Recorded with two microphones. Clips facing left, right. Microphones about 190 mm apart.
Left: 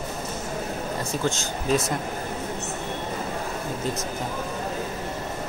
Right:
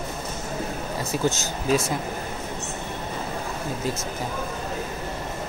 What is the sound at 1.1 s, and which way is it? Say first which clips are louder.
Speech: right 4 dB; centre (ahead or behind).